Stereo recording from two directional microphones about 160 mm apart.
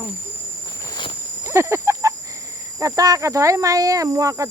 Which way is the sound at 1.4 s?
15° right (ahead or behind).